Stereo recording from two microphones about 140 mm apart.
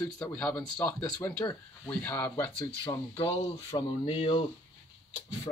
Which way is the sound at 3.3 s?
40° left (ahead or behind).